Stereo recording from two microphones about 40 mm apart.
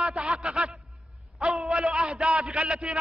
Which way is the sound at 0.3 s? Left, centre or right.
Centre.